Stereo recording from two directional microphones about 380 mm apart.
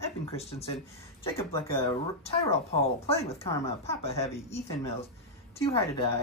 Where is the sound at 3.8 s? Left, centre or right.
Centre.